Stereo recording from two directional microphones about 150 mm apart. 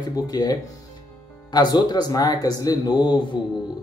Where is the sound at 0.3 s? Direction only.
25° left (ahead or behind).